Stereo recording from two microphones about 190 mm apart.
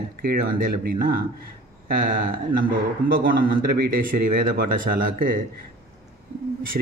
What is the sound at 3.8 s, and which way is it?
Speech, 50° right (ahead or behind).